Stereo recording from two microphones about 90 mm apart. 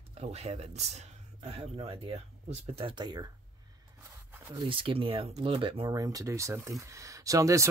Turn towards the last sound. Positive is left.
turn(degrees=-35)  # may be behind; listen again after turning